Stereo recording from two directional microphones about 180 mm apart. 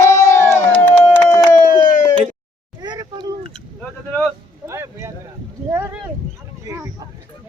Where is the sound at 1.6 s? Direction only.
50° left (ahead or behind).